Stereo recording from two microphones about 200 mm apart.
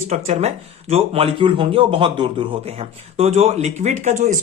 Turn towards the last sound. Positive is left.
turn(degrees=-35)  # may be behind; listen again after turning